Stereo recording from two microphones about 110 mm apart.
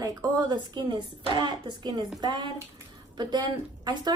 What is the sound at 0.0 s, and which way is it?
Speech, 35° right (ahead or behind).